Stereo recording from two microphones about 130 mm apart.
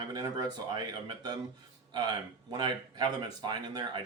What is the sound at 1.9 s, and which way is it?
Speech, 35° right (ahead or behind).